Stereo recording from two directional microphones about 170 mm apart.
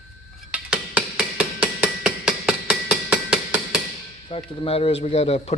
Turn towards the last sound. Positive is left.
turn(degrees=40)  # may be behind; listen again after turning